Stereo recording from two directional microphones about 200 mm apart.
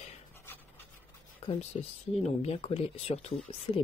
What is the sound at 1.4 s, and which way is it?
Speech, 30° left (ahead or behind).